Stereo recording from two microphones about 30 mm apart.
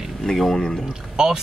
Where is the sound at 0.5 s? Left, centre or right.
Centre.